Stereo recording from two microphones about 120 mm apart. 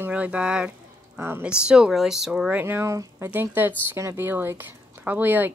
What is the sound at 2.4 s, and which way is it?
Speech, 15° right (ahead or behind).